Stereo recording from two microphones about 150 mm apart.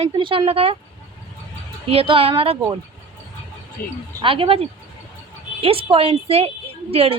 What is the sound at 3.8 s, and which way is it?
Speech, 75° left (ahead or behind).